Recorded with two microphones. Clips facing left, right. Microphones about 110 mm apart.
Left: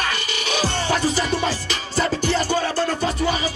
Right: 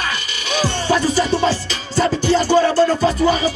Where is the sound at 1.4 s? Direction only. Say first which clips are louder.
Right 5 dB; 30° right (ahead or behind).